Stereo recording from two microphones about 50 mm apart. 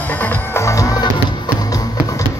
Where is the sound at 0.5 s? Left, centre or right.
Left.